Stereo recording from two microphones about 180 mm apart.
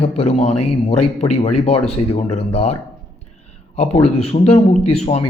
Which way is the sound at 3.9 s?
35° left (ahead or behind).